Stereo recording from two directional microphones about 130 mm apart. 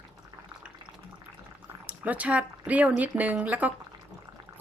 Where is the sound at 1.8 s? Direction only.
10° right (ahead or behind).